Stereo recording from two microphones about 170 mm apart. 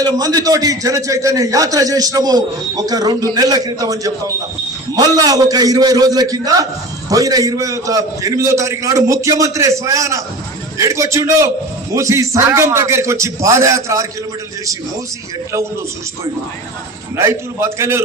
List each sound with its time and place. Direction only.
0.0 s a man's voice: 20° right (ahead or behind)
17.2 s a man's voice: 15° right (ahead or behind)